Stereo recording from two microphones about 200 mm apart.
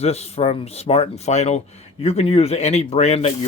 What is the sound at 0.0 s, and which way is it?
Speech, 30° left (ahead or behind).